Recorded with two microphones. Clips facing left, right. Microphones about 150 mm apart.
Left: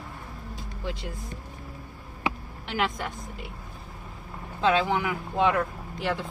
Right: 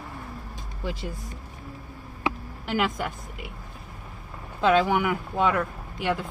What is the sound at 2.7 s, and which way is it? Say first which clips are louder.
Speech: right 3 dB; 5° right (ahead or behind).